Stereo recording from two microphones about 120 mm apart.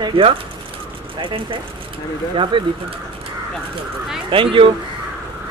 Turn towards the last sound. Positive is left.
turn(degrees=-45)  # may be behind; listen again after turning